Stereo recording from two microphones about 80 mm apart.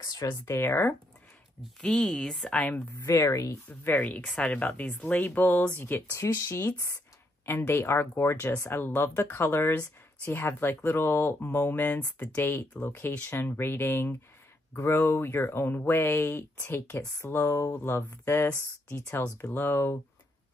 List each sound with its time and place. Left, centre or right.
0.0 s speech: left
0.5 s speech: left
1.8 s speech: centre
3.1 s a woman's voice: left
3.6 s a woman's voice: left